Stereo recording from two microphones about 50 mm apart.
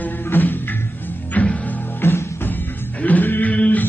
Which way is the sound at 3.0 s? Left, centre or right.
Left.